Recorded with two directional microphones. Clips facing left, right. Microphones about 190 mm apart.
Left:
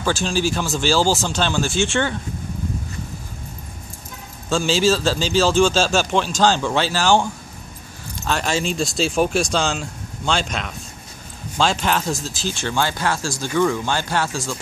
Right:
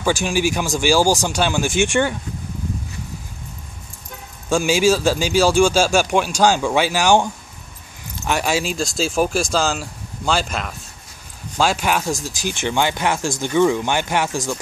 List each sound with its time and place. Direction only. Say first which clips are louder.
0.0 s speech: right 2 dB; 15° right (ahead or behind)
4.5 s speech: right 2 dB; 15° right (ahead or behind)
8.3 s speech: right 1 dB; 10° right (ahead or behind)